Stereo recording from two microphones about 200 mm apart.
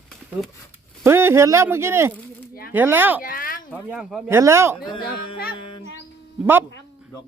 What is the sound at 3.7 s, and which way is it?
Speech, 5° right (ahead or behind).